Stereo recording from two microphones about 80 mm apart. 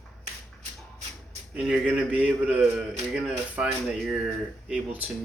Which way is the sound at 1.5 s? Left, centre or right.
Centre.